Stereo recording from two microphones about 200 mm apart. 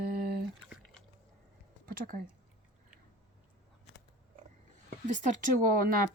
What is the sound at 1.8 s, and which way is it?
Speech, 45° right (ahead or behind).